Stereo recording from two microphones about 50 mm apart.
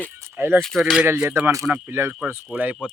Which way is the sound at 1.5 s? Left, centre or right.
Right.